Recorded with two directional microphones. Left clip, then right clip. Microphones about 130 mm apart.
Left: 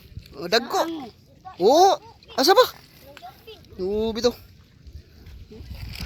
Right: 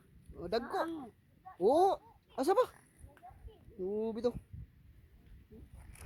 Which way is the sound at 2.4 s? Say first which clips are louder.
Left 14 dB; centre (ahead or behind).